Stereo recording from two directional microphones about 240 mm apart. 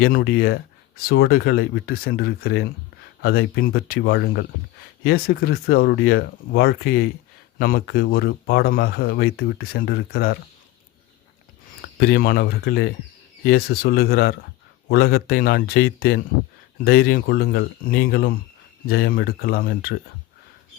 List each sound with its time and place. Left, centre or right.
0.0 s speech: left
11.9 s speech: left